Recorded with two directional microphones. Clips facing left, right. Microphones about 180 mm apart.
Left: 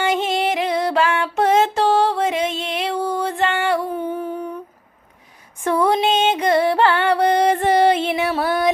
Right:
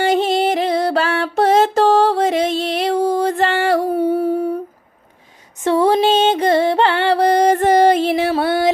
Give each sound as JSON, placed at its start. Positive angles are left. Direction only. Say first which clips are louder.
{"t": 0.0, "sound": "music", "louder": "right 4 dB", "side_deg": -35}
{"t": 5.6, "sound": "music", "louder": "right 4 dB", "side_deg": -25}